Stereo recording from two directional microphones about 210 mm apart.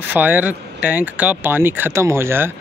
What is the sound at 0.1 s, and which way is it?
Speech, 10° right (ahead or behind).